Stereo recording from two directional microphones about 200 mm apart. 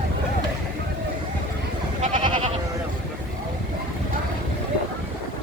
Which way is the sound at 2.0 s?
35° right (ahead or behind).